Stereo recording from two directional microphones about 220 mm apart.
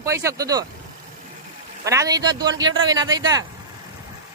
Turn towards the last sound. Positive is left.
turn(degrees=-20)  # may be behind; listen again after turning